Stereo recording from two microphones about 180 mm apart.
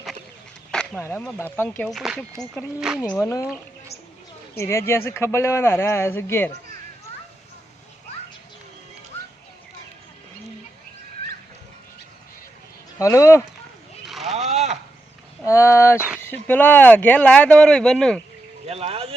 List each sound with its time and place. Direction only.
0.7 s a sound: 5° left (ahead or behind)
1.0 s speech: 10° left (ahead or behind)
3.0 s speech: 15° left (ahead or behind)
4.5 s speech: 15° left (ahead or behind)
13.0 s speech: 15° left (ahead or behind)
14.1 s a sound: centre (ahead or behind)
14.5 s a sound: 40° right (ahead or behind)
15.4 s speech: 15° left (ahead or behind)
18.6 s speech: 35° right (ahead or behind)